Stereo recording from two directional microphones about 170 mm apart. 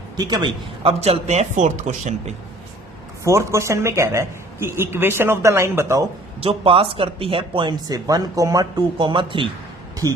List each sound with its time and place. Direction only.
0.2 s speech: 25° right (ahead or behind); by 2.3 s 40° right (ahead or behind)
3.2 s speech: 15° right (ahead or behind)
6.4 s speech: 35° right (ahead or behind)
10.0 s speech: 20° right (ahead or behind)